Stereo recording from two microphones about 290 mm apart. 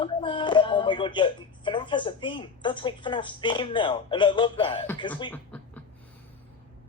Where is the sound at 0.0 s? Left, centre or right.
Centre.